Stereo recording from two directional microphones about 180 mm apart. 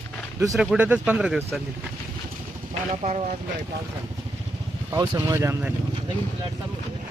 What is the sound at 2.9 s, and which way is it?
Speech, 40° right (ahead or behind).